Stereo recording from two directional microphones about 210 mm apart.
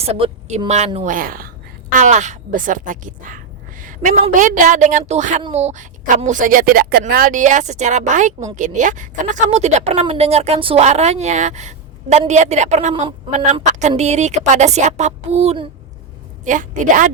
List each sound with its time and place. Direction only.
0.0 s speech: 30° right (ahead or behind)
1.0 s speech: 40° right (ahead or behind); by 13.4 s 25° right (ahead or behind)
13.4 s speech: 35° right (ahead or behind)